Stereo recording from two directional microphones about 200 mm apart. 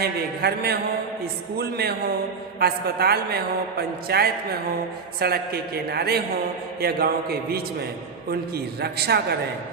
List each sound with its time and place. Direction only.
0.0 s a man's voice: 50° right (ahead or behind)